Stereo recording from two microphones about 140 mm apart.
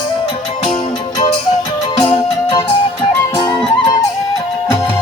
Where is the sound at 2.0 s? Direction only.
30° left (ahead or behind).